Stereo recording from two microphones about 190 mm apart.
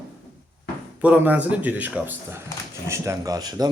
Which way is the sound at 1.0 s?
10° right (ahead or behind).